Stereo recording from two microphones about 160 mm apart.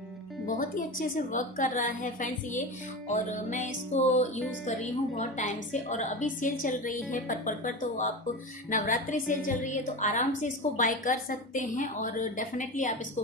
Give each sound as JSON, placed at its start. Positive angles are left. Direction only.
{"t": 0.6, "sound": "a woman's voice", "side_deg": 60}